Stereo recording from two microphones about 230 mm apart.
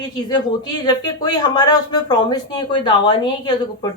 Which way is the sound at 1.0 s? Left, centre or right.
Centre.